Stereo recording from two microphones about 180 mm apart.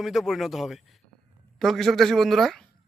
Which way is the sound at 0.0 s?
Centre (ahead or behind).